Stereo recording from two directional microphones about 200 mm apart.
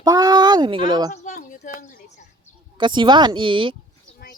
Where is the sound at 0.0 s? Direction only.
20° right (ahead or behind).